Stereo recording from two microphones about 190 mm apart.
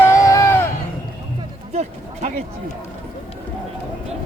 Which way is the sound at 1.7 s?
35° right (ahead or behind).